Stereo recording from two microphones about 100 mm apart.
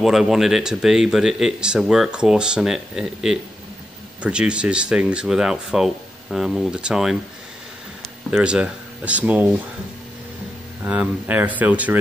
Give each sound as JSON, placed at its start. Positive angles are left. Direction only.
{"t": 0.0, "sound": "speech", "side_deg": -5}
{"t": 8.3, "sound": "speech", "side_deg": -10}
{"t": 10.8, "sound": "speech", "side_deg": -15}